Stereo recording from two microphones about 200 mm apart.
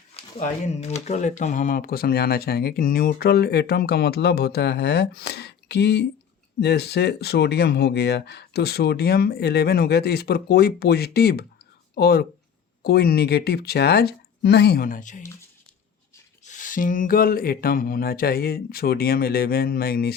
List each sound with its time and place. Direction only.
0.3 s speech: 35° left (ahead or behind)
16.4 s speech: 40° left (ahead or behind)